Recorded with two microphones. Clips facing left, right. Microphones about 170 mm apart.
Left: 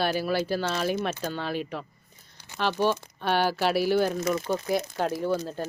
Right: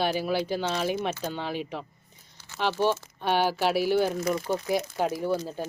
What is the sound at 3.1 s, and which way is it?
A woman's voice, 15° right (ahead or behind).